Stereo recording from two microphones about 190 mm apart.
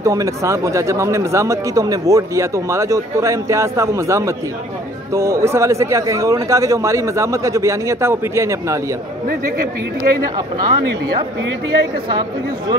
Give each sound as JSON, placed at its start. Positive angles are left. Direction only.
{"t": 0.0, "sound": "speech", "side_deg": -15}
{"t": 10.3, "sound": "speech", "side_deg": -20}
{"t": 12.1, "sound": "speech", "side_deg": -25}